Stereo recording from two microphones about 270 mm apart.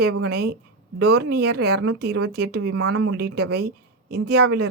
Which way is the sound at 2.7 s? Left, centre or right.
Right.